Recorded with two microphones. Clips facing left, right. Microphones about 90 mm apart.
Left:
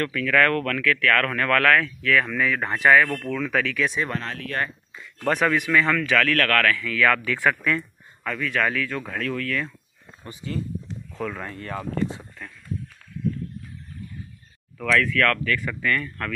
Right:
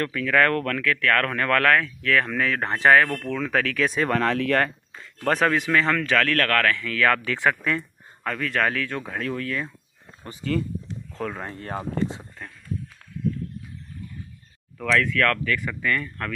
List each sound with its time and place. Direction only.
0.0 s speech: 20° right (ahead or behind)
2.0 s speech: 40° right (ahead or behind)
3.8 s speech: 45° right (ahead or behind)
4.1 s speech: 85° right
5.3 s speech: 35° right (ahead or behind)
6.8 s speech: 35° right (ahead or behind)
7.2 s speech: 25° right (ahead or behind)
8.2 s speech: 45° right (ahead or behind)
9.0 s speech: 25° right (ahead or behind)
10.4 s speech: 60° right (ahead or behind)
11.1 s speech: 35° right (ahead or behind)
14.8 s speech: 20° right (ahead or behind)